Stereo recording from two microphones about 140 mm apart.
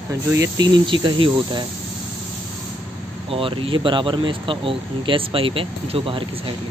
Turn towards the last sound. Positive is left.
turn(degrees=-40)  # may be behind; listen again after turning